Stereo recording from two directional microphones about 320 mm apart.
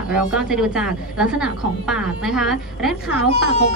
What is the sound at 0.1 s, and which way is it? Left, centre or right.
A woman's voice, centre.